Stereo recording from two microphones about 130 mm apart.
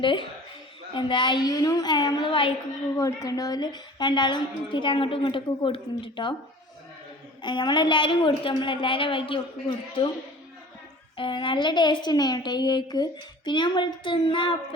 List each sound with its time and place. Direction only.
0.0 s a woman's voice: 40° left (ahead or behind)
3.0 s a woman's voice: 25° left (ahead or behind)
7.4 s a woman's voice: 35° left (ahead or behind)
11.2 s a woman's voice: 40° left (ahead or behind)